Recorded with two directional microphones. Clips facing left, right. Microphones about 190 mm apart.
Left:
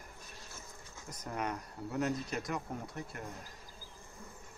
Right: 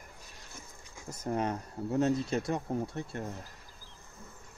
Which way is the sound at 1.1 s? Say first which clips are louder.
Right 6 dB; 25° right (ahead or behind).